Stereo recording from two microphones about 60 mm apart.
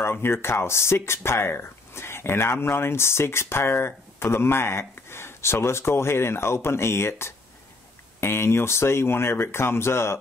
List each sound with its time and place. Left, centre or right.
0.0 s speech: left